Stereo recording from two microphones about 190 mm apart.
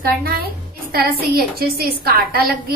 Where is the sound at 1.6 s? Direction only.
55° right (ahead or behind).